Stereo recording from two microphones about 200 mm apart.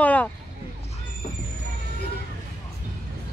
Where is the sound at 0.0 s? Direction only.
10° left (ahead or behind).